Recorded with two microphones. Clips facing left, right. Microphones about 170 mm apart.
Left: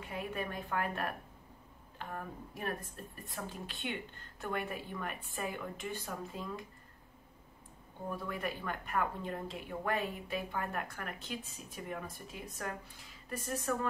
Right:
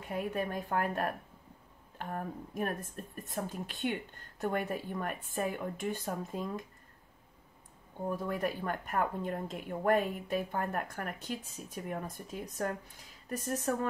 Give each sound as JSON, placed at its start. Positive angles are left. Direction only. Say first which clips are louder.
{"t": 0.0, "sound": "a woman's voice", "louder": "right 5 dB", "side_deg": -40}
{"t": 8.2, "sound": "speech", "louder": "right 4 dB", "side_deg": -45}